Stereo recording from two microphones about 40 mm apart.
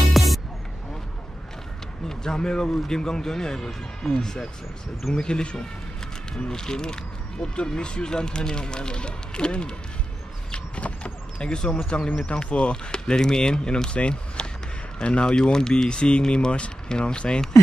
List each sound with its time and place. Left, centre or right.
0.1 s music: centre
2.0 s a man's voice: centre
10.5 s vehicle: left
11.3 s speech: left